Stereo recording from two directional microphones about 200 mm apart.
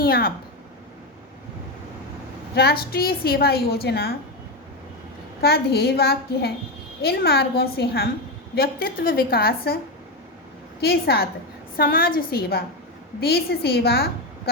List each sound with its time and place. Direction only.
0.0 s a woman's voice: 50° left (ahead or behind)
2.6 s a woman's voice: 50° left (ahead or behind)
5.4 s a woman's voice: 50° left (ahead or behind)
10.8 s a woman's voice: 50° left (ahead or behind)